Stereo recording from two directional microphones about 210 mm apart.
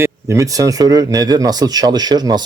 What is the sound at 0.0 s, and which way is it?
Speech, 15° right (ahead or behind).